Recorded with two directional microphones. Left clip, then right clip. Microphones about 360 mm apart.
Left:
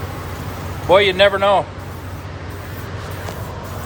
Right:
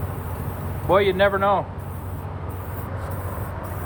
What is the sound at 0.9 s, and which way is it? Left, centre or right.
Speech, centre.